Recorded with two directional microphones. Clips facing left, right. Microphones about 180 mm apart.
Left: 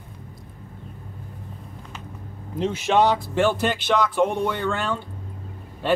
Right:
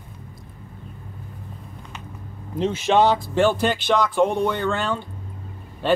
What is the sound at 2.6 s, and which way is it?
Speech, 30° right (ahead or behind).